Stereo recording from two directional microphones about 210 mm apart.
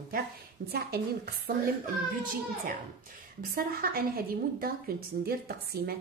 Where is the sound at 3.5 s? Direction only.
45° right (ahead or behind).